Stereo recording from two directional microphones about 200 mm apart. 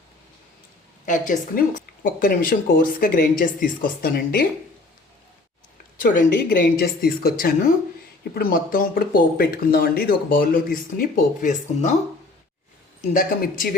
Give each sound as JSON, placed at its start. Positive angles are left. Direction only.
{"t": 1.0, "sound": "a woman's voice", "side_deg": 40}
{"t": 6.0, "sound": "speech", "side_deg": 45}
{"t": 13.0, "sound": "speech", "side_deg": 45}